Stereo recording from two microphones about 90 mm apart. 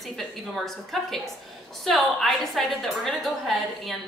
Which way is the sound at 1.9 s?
5° left (ahead or behind).